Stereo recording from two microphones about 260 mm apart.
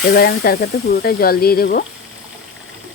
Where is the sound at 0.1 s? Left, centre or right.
Left.